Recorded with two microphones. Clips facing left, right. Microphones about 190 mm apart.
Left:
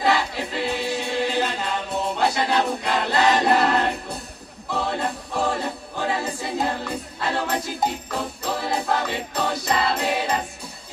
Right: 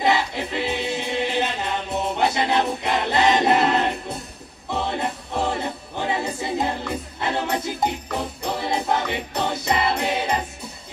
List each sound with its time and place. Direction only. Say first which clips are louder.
0.0 s music: right 1 dB; 20° right (ahead or behind)